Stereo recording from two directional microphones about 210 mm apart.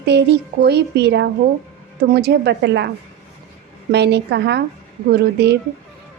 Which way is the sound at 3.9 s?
55° right (ahead or behind).